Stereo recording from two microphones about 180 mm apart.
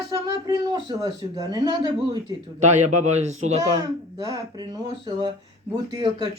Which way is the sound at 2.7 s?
40° right (ahead or behind).